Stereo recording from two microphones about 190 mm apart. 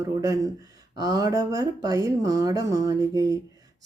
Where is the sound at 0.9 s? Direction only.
20° right (ahead or behind).